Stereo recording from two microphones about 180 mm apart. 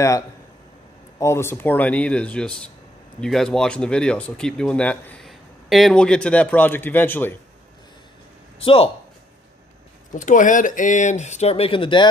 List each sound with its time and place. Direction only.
1.2 s speech: 15° left (ahead or behind)
8.5 s speech: 30° left (ahead or behind)
10.1 s speech: 45° left (ahead or behind); by 12.1 s 25° left (ahead or behind)